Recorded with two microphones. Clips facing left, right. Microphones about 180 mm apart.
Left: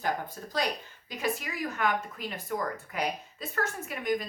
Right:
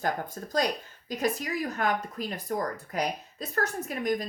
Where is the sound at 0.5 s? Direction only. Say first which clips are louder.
Right 4 dB; 40° right (ahead or behind).